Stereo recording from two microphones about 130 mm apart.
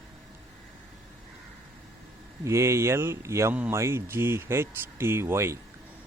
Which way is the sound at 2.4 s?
20° right (ahead or behind).